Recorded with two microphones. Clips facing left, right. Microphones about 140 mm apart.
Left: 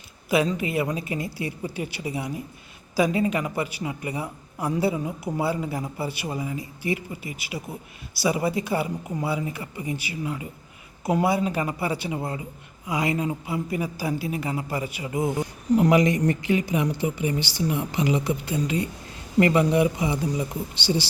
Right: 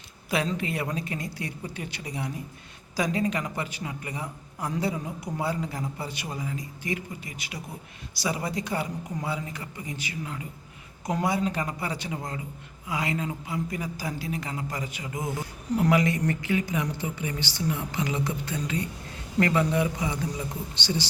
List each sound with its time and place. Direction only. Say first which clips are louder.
0.3 s a man's voice: left 5 dB; 5° left (ahead or behind)